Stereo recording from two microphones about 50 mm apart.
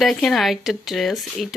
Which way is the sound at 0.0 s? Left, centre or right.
Centre.